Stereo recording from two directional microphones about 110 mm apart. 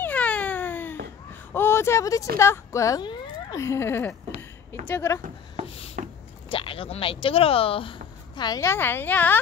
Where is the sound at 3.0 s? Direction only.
45° left (ahead or behind).